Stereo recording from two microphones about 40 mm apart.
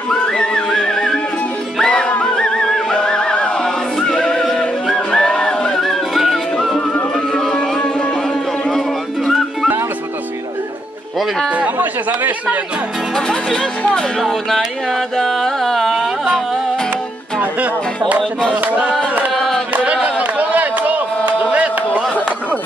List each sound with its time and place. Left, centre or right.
0.1 s music: centre
4.1 s music: centre
5.8 s music: centre
8.6 s a sound: centre
11.5 s speech: right
13.1 s speech: centre
15.8 s music: centre
17.4 s speech: right
19.3 s music: centre
19.7 s a sound: right